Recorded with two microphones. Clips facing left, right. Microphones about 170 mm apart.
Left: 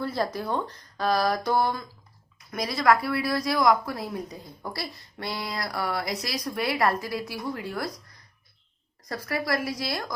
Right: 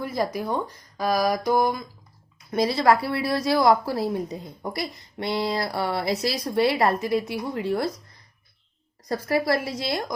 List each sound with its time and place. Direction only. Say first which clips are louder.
0.0 s speech: right 2 dB; 10° right (ahead or behind)
2.5 s a woman's voice: right 3 dB; 30° right (ahead or behind)
9.0 s a woman's voice: right 6 dB; 30° right (ahead or behind)